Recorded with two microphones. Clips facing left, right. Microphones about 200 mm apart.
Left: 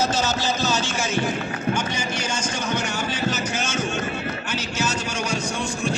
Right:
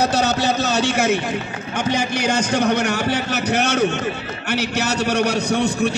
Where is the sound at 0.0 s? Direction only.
65° right (ahead or behind).